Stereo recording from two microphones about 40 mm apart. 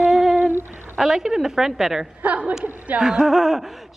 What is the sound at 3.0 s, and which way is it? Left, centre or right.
Speech, centre.